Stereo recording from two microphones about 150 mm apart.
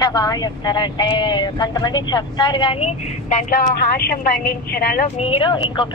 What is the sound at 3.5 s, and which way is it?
Speech, 80° left.